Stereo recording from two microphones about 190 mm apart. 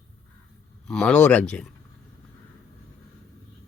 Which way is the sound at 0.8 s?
5° left (ahead or behind).